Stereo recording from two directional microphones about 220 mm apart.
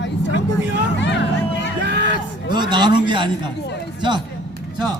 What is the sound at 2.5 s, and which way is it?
A man's voice, 20° right (ahead or behind).